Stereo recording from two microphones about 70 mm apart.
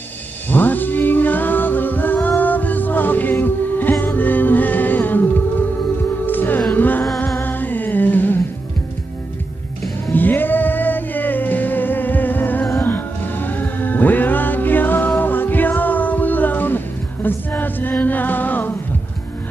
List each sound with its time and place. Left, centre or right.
0.5 s music: left
6.2 s music: left
10.1 s music: left